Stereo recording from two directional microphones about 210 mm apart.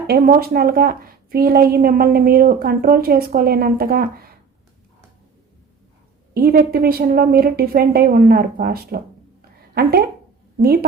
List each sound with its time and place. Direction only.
0.1 s a woman's voice: 45° right (ahead or behind)
6.3 s a woman's voice: 45° right (ahead or behind)
10.6 s a woman's voice: 45° right (ahead or behind)